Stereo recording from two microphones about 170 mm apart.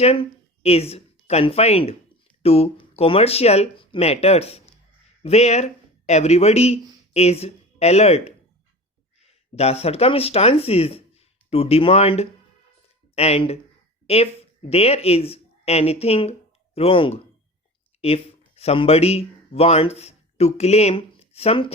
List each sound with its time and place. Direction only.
0.0 s speech: 35° left (ahead or behind)